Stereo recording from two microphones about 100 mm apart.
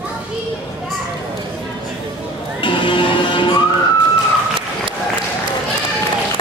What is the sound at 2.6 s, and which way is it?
Music, 55° left (ahead or behind).